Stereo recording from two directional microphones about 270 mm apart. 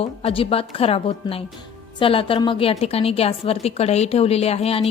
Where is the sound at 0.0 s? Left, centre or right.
Left.